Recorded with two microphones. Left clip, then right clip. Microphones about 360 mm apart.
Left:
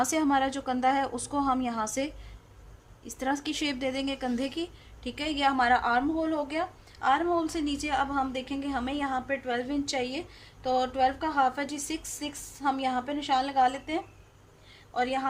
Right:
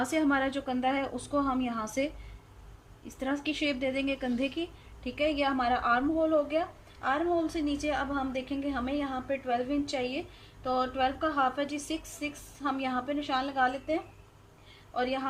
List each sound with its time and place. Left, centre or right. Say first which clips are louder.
0.0 s a woman's voice: left 2 dB; centre
3.2 s a woman's voice: left 2 dB; centre
14.9 s a woman's voice: left 3 dB; left